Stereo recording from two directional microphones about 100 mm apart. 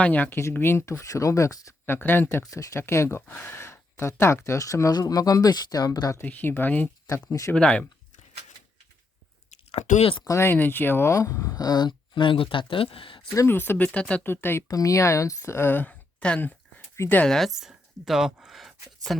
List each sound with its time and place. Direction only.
0.0 s speech: 15° left (ahead or behind); by 1.7 s 35° left (ahead or behind)
1.9 s speech: 20° left (ahead or behind)
2.4 s speech: 35° left (ahead or behind)
6.2 s speech: 20° left (ahead or behind)
6.8 s speech: 30° left (ahead or behind)
7.5 s speech: 10° left (ahead or behind)
9.7 s speech: 85° left
10.2 s speech: 25° left (ahead or behind); by 13.2 s 60° left (ahead or behind)
13.3 s speech: 30° left (ahead or behind)
13.6 s speech: 20° left (ahead or behind)
14.3 s speech: 20° left (ahead or behind)
14.7 s speech: 35° left (ahead or behind); by 16.8 s 15° left (ahead or behind)
16.9 s speech: 25° left (ahead or behind)
17.2 s speech: 5° left (ahead or behind)